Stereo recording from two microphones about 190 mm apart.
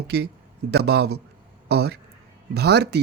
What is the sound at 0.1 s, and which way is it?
A man's voice, 60° right (ahead or behind).